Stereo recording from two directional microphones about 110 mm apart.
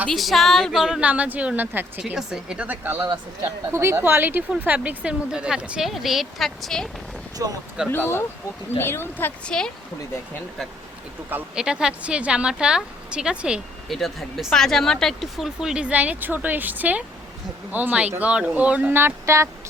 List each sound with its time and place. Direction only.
0.1 s a woman's voice: centre (ahead or behind); by 1.9 s 15° right (ahead or behind)
2.0 s a woman's voice: 5° right (ahead or behind)
7.4 s speech: 30° right (ahead or behind)
7.9 s speech: 20° left (ahead or behind)
9.5 s speech: 5° left (ahead or behind)
11.3 s a woman's voice: 10° right (ahead or behind)